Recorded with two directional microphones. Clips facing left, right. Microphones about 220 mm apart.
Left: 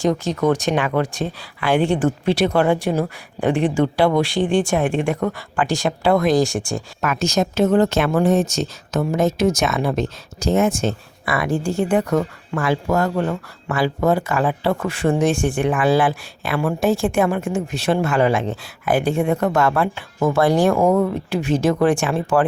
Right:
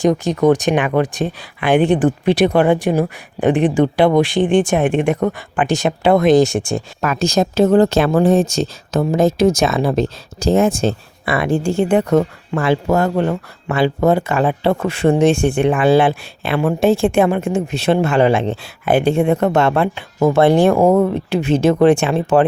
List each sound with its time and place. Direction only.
0.0 s speech: 15° right (ahead or behind)